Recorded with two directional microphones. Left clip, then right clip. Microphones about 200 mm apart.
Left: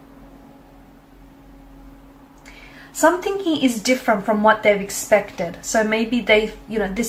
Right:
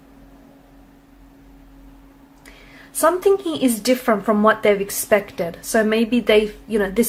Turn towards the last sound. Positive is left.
turn(degrees=-50)  # may be behind; listen again after turning